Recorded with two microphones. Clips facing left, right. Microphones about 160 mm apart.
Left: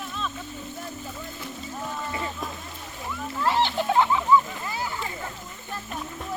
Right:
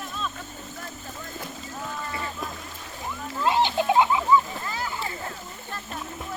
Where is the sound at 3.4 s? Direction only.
15° right (ahead or behind).